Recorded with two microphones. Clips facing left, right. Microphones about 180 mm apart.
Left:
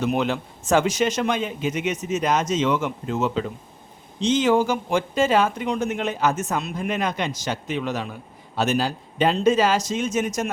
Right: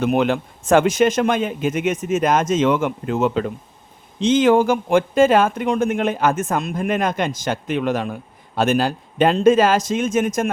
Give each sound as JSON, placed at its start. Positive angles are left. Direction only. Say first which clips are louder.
{"t": 0.0, "sound": "speech", "louder": "right 5 dB", "side_deg": -55}